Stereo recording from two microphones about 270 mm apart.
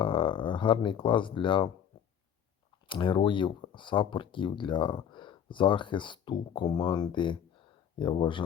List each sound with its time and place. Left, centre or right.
0.0 s speech: centre
2.8 s speech: centre